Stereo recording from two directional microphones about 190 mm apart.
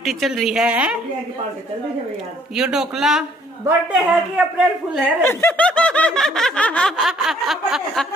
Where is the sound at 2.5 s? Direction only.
5° right (ahead or behind).